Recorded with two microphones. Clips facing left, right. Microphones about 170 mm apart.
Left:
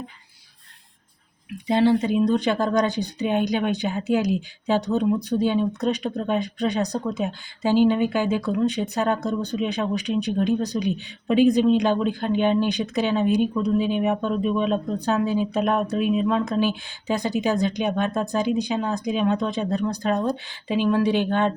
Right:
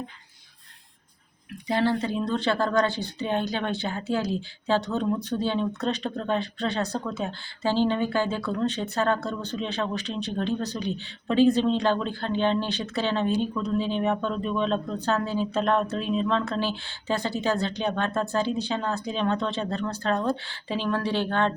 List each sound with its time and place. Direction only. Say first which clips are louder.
1.6 s speech: left 5 dB; 20° left (ahead or behind)